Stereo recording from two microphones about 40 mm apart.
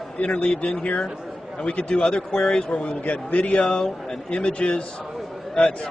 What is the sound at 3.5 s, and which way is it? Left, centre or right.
A man's voice, left.